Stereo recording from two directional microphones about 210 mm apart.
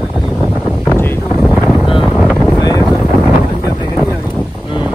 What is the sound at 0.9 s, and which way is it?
Wind noise, 10° left (ahead or behind).